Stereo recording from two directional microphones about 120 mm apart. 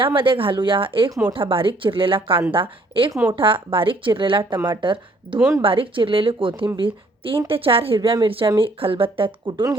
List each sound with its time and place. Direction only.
0.0 s a woman's voice: 45° right (ahead or behind)